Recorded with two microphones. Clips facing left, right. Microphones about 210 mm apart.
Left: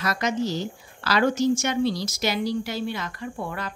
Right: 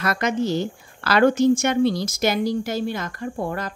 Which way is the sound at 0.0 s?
55° right (ahead or behind).